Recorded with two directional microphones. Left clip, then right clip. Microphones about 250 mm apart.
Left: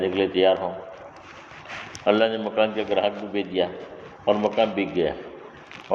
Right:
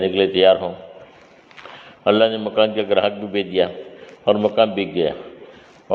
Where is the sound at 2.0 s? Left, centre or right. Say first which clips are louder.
Right 5 dB; right.